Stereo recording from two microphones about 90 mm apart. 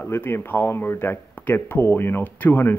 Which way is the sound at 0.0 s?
25° left (ahead or behind).